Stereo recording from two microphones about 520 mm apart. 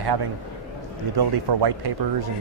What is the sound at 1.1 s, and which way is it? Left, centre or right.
Speech, right.